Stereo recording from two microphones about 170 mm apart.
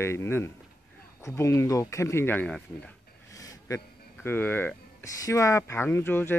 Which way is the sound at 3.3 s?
20° left (ahead or behind).